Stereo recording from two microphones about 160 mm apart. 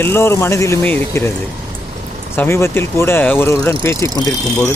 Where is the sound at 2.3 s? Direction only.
15° left (ahead or behind).